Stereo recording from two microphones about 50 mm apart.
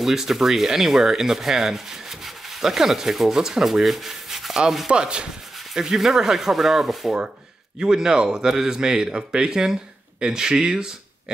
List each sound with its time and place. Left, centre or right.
0.0 s rub: centre
4.9 s speech: centre
5.8 s rub: centre